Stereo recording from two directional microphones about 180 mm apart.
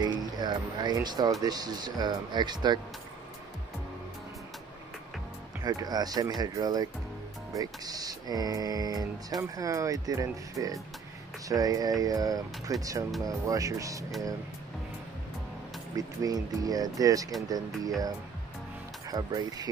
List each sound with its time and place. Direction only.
0.0 s speech: 25° right (ahead or behind)
5.6 s speech: 20° right (ahead or behind)
16.0 s speech: 20° right (ahead or behind)
19.0 s speech: 20° right (ahead or behind)